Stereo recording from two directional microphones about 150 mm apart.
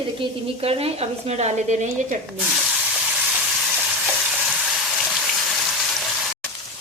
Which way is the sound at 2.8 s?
5° right (ahead or behind).